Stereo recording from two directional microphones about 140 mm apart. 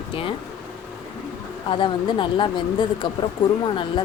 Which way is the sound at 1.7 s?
35° left (ahead or behind).